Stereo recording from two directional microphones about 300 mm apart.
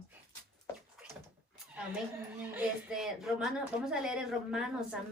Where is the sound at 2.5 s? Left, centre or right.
Centre.